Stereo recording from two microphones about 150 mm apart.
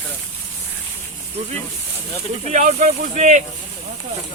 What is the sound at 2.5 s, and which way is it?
Speech, 50° right (ahead or behind).